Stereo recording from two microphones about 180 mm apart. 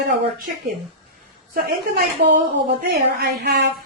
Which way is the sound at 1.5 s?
55° right (ahead or behind).